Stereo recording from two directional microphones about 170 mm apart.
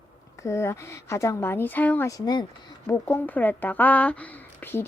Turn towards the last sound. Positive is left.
turn(degrees=10)  # may be behind; listen again after turning